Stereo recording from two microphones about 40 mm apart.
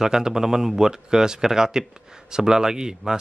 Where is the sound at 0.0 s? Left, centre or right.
Centre.